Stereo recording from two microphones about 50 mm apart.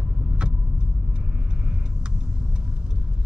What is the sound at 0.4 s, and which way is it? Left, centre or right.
Vehicle, right.